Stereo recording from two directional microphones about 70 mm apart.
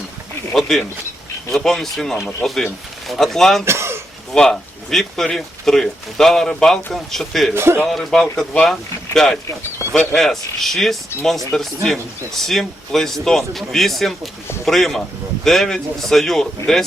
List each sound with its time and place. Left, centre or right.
0.5 s speech: centre
3.7 s a sound: right
4.3 s speech: centre
7.5 s a man's voice: right
7.9 s speech: centre